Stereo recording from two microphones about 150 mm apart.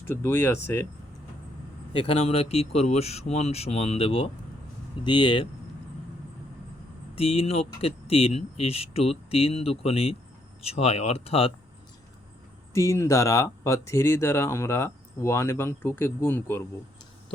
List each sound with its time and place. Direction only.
0.1 s speech: 15° left (ahead or behind)
1.9 s speech: 40° left (ahead or behind)
7.2 s speech: 40° left (ahead or behind)
12.7 s speech: 20° left (ahead or behind)